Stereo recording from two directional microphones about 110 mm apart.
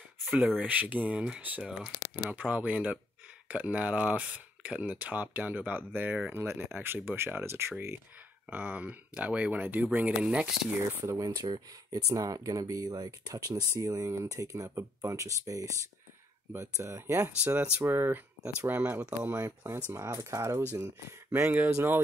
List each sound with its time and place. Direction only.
0.6 s speech: 15° right (ahead or behind)
11.1 s speech: 35° right (ahead or behind)